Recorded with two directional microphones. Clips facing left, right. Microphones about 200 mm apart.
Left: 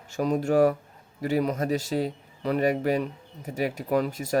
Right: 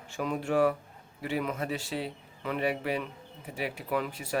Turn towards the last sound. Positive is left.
turn(degrees=40)  # may be behind; listen again after turning